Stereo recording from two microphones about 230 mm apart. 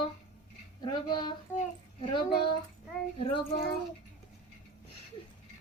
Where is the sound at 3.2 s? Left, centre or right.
Left.